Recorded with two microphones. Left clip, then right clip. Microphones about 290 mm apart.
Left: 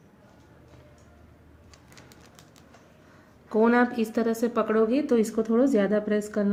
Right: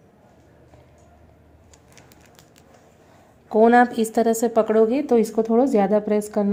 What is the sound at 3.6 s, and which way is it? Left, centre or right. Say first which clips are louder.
A woman's voice: right 7 dB; right.